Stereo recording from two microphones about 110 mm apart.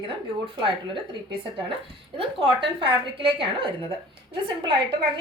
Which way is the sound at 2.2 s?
55° right (ahead or behind).